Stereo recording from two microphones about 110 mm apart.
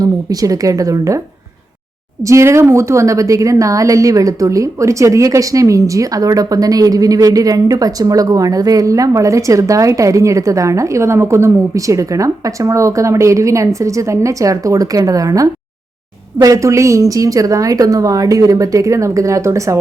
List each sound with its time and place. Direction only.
0.0 s a woman's voice: 35° right (ahead or behind)
2.2 s a woman's voice: 25° right (ahead or behind)